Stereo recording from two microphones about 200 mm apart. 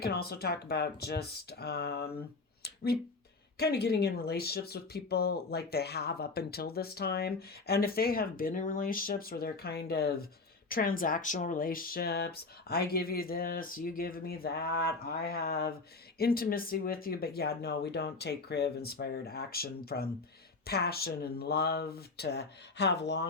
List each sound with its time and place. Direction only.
0.0 s speech: 50° left (ahead or behind)
3.6 s speech: 55° left (ahead or behind)